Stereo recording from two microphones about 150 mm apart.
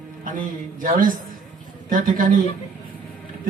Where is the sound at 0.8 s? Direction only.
65° right (ahead or behind).